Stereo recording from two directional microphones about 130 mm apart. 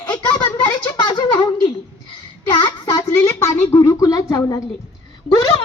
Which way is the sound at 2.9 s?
30° left (ahead or behind).